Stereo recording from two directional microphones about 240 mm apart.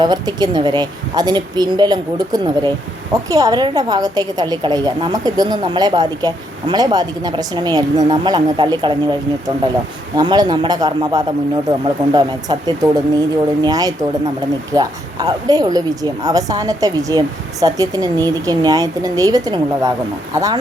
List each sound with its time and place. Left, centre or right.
0.0 s speech: centre
10.2 s speech: centre